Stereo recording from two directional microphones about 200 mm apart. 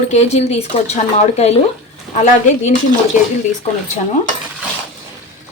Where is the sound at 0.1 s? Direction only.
35° left (ahead or behind).